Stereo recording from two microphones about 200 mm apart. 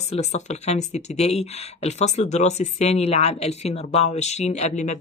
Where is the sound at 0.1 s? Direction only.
30° left (ahead or behind).